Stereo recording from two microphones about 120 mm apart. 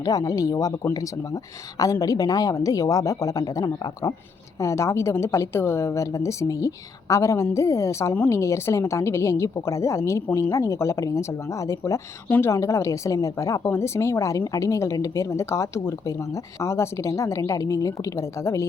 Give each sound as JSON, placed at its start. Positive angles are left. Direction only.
{"t": 0.0, "sound": "speech", "side_deg": 30}